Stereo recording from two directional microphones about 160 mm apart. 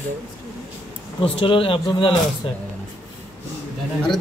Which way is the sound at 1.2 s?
35° left (ahead or behind).